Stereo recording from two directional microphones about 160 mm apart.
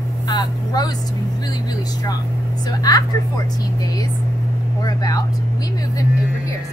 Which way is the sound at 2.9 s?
25° left (ahead or behind).